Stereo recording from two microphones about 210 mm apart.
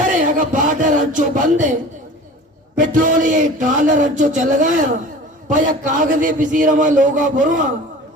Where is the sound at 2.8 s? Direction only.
40° right (ahead or behind).